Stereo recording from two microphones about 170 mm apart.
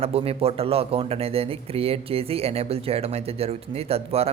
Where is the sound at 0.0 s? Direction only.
35° right (ahead or behind).